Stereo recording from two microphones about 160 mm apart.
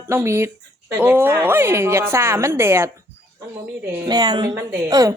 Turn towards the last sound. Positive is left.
turn(degrees=-20)  # may be behind; listen again after turning